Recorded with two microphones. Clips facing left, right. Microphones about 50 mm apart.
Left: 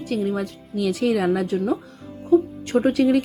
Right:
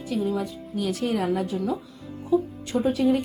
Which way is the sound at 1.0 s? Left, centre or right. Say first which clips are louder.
Left 6 dB; left.